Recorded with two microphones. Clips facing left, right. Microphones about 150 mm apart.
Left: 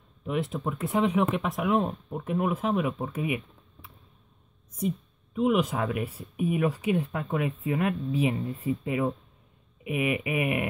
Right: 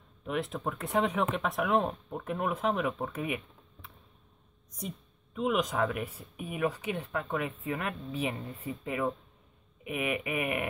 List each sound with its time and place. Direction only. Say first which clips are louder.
0.3 s speech: left 3 dB; centre (ahead or behind)
4.7 s speech: left 11 dB; 10° left (ahead or behind)